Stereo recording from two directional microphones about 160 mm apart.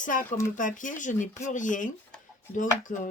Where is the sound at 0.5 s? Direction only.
55° left (ahead or behind).